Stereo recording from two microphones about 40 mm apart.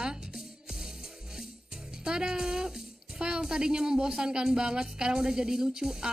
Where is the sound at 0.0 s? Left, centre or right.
Centre.